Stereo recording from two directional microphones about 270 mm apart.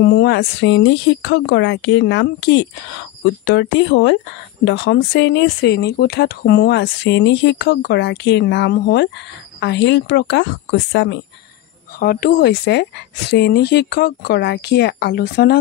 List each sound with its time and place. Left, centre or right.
0.0 s speech: left